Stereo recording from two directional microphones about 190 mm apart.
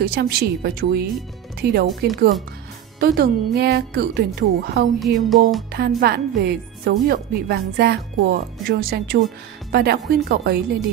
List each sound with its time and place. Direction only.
0.0 s a woman's voice: 55° right (ahead or behind)
4.9 s music: centre (ahead or behind)
5.9 s a woman's voice: 55° right (ahead or behind)